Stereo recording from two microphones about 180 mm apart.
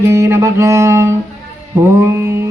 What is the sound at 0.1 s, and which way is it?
Mantra, 15° right (ahead or behind).